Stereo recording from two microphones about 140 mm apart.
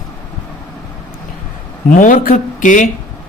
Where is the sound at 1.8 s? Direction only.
70° left (ahead or behind).